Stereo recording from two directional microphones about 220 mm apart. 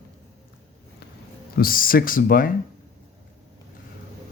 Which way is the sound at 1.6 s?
40° left (ahead or behind).